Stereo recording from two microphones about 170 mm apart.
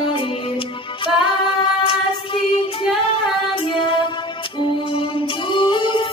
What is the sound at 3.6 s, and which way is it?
Music, 30° left (ahead or behind).